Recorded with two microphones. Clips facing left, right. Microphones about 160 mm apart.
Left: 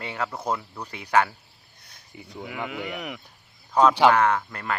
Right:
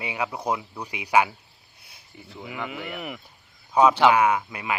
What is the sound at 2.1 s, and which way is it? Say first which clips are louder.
Speech: left 3 dB; 15° left (ahead or behind).